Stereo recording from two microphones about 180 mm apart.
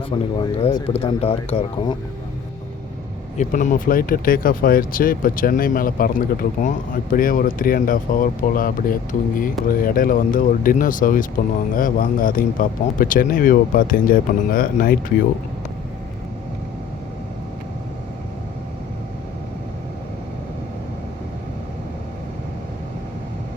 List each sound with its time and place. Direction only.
0.1 s speech: 30° left (ahead or behind)
3.3 s speech: 45° left (ahead or behind)